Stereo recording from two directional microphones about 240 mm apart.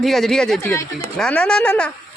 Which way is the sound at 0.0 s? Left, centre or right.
Centre.